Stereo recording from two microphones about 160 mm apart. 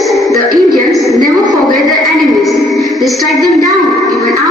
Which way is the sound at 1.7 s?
Centre (ahead or behind).